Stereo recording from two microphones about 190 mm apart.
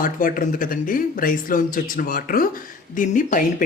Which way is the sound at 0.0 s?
45° left (ahead or behind).